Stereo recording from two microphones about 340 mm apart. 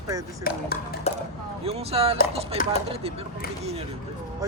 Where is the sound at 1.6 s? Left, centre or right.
Centre.